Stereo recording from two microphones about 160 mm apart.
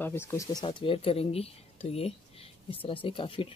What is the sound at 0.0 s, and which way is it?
Speech, 15° left (ahead or behind).